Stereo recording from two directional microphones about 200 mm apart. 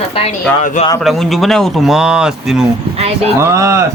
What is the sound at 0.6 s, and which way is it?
Speech, 40° left (ahead or behind).